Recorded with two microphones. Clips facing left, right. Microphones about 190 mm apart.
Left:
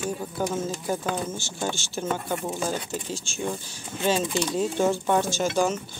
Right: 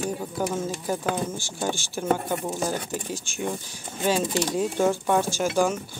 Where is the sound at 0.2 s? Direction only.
5° right (ahead or behind).